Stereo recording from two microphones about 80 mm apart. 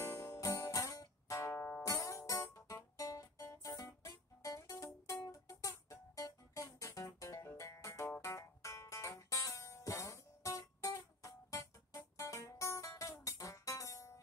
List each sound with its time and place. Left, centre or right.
0.0 s music: left